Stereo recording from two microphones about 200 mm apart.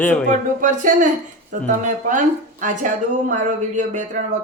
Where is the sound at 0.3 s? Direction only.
40° right (ahead or behind).